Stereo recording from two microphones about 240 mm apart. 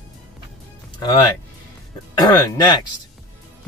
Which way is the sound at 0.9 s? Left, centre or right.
Centre.